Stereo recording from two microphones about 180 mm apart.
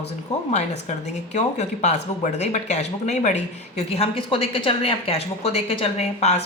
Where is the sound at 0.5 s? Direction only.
40° left (ahead or behind).